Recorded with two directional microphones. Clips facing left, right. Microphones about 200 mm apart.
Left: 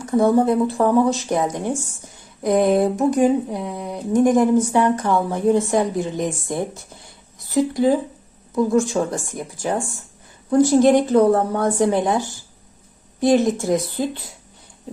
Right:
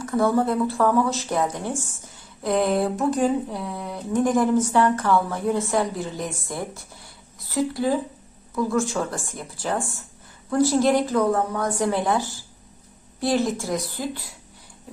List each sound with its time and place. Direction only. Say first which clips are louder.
0.0 s a woman's voice: left 5 dB; 20° left (ahead or behind)